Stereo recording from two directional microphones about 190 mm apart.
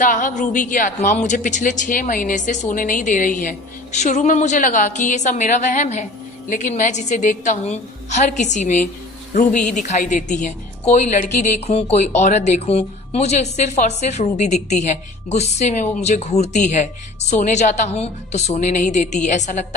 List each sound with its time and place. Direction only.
0.0 s a woman's voice: 45° left (ahead or behind)